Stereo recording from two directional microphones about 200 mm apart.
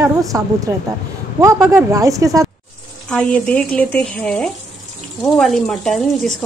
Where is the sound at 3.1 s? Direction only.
5° left (ahead or behind).